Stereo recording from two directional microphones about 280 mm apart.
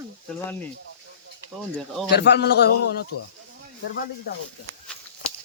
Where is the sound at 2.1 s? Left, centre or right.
Left.